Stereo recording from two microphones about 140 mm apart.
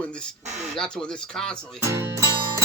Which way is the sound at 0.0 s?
5° left (ahead or behind).